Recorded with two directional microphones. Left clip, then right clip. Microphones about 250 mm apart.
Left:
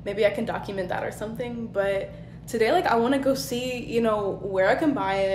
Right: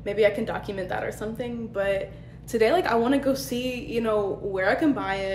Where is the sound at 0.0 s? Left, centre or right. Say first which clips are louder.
Right 1 dB; centre.